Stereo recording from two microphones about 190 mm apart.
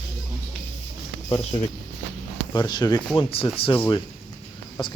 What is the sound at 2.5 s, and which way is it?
Speech, 25° left (ahead or behind).